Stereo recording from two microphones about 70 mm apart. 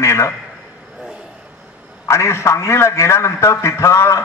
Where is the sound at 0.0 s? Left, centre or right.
Left.